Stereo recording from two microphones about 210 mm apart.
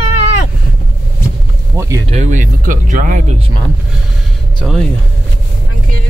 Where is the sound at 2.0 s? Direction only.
35° right (ahead or behind).